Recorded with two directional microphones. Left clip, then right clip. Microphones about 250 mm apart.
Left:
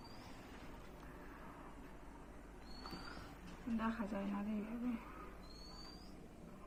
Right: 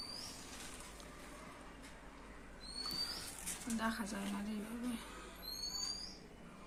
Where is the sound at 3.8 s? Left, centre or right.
Centre.